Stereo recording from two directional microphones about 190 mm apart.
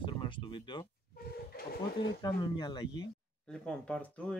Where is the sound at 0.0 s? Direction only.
25° left (ahead or behind).